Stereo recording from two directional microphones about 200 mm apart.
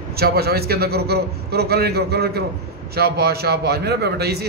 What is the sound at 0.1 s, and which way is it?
A man's voice, 50° right (ahead or behind).